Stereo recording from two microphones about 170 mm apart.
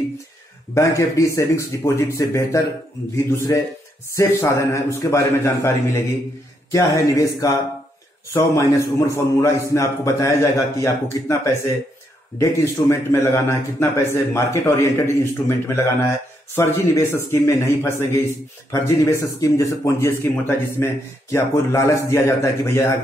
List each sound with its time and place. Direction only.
0.7 s speech: 15° left (ahead or behind)